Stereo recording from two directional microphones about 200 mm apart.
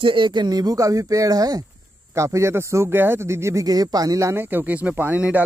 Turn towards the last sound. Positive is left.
turn(degrees=-10)  # may be behind; listen again after turning